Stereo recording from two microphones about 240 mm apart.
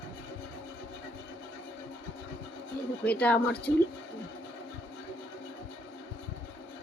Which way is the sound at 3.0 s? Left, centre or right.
Centre.